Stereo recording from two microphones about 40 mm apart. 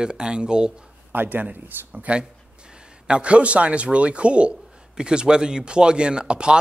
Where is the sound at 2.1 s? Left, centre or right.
Right.